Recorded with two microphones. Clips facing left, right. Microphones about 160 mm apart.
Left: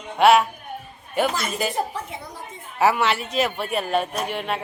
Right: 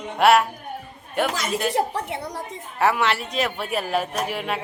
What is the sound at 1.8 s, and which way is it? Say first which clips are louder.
Speech: right 4 dB; 85° right.